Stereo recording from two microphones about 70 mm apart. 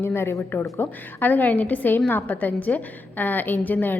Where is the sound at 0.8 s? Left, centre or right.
Left.